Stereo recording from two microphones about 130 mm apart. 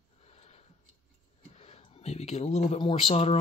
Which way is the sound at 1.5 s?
55° left (ahead or behind).